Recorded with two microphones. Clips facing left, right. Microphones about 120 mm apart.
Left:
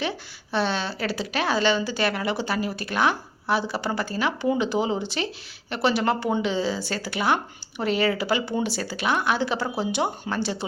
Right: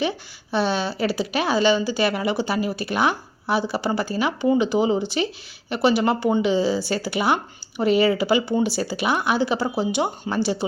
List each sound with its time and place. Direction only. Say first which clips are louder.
0.5 s speech: right 3 dB; 5° right (ahead or behind)